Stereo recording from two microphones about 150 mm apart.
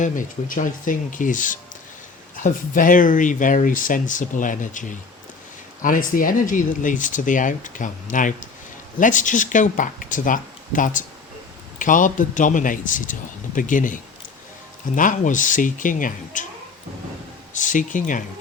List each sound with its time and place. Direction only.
0.0 s speech: 65° left (ahead or behind)
17.5 s speech: 55° left (ahead or behind)